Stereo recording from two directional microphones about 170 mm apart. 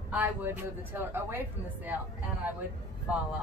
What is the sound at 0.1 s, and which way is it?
Speech, 10° right (ahead or behind).